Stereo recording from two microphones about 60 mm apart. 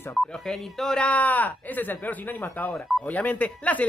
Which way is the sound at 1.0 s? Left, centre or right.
Left.